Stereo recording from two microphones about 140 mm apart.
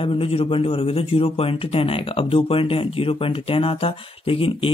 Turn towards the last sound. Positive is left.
turn(degrees=40)  # may be behind; listen again after turning